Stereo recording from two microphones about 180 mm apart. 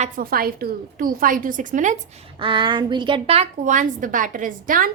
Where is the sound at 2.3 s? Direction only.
25° right (ahead or behind); by 4.9 s 50° right (ahead or behind).